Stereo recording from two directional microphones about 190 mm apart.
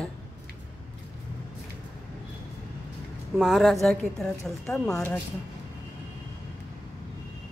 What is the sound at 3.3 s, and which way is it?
A woman's voice, centre (ahead or behind).